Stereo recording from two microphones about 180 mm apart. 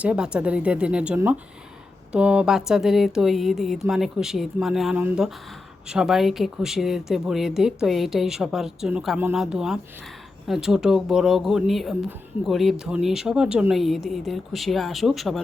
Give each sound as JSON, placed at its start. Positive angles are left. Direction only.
{"t": 0.0, "sound": "speech", "side_deg": -5}